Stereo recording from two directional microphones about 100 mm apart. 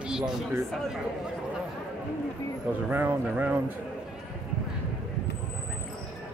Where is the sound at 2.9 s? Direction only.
15° right (ahead or behind).